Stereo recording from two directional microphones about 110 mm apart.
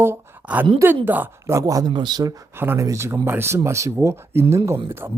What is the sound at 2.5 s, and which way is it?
Speech, 20° right (ahead or behind).